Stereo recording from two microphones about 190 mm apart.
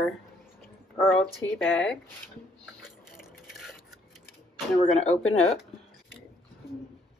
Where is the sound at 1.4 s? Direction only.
15° left (ahead or behind).